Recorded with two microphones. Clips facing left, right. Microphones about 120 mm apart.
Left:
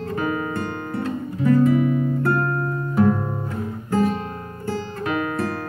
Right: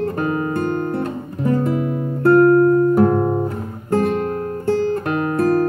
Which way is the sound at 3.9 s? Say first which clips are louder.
Right 4 dB; 55° right (ahead or behind).